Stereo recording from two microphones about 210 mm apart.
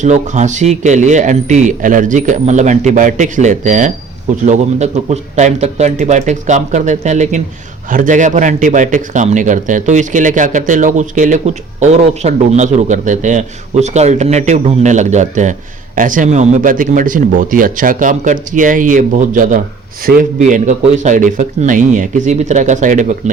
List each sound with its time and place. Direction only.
0.0 s speech: 35° right (ahead or behind)